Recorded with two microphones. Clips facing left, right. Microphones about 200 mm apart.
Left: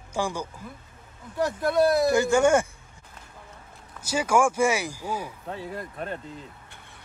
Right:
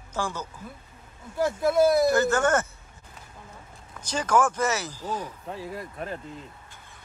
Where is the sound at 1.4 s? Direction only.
Centre (ahead or behind).